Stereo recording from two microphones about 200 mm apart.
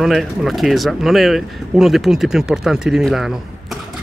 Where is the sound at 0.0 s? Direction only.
Centre (ahead or behind).